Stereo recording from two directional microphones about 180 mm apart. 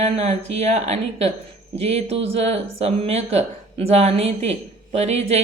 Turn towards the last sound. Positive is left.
turn(degrees=-35)  # may be behind; listen again after turning